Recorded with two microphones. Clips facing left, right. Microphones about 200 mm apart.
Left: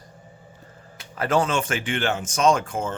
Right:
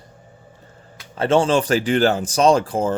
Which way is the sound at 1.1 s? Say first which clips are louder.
Right 6 dB; 25° right (ahead or behind).